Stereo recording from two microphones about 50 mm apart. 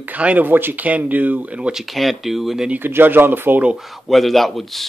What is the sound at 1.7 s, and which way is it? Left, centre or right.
Speech, centre.